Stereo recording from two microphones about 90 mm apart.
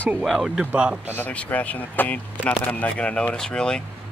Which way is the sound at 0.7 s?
15° right (ahead or behind).